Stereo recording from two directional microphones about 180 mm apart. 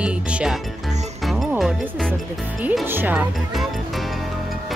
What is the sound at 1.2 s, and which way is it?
Music, centre (ahead or behind).